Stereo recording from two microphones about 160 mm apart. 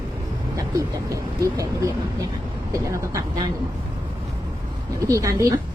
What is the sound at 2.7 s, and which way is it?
Speech, 20° right (ahead or behind).